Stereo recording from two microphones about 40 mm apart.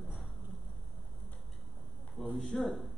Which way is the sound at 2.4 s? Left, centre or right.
Centre.